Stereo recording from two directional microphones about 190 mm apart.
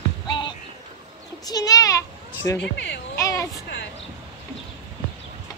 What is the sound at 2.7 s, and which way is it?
Speech, 65° left (ahead or behind).